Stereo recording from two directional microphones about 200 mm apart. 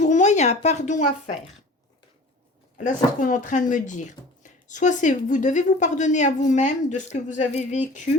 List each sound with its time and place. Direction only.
0.0 s speech: 35° left (ahead or behind)
2.7 s a woman's voice: 40° left (ahead or behind)